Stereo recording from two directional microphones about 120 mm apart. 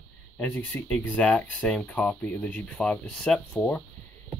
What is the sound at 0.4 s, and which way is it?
Speech, 10° left (ahead or behind).